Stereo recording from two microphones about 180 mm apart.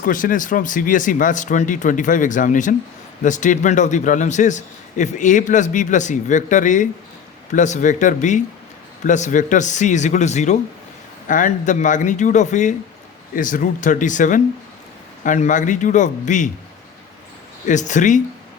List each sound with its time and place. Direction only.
0.0 s a man's voice: 50° left (ahead or behind)
17.7 s a man's voice: 45° left (ahead or behind)